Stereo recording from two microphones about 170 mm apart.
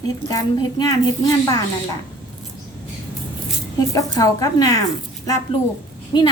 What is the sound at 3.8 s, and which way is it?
Speech, 20° left (ahead or behind).